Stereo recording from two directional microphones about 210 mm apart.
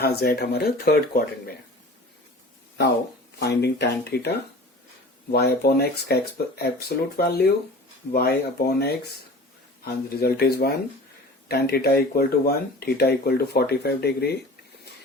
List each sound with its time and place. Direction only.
0.0 s speech: 50° left (ahead or behind)
3.4 s speech: 50° left (ahead or behind)